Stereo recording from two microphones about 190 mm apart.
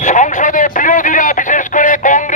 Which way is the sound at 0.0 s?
40° left (ahead or behind).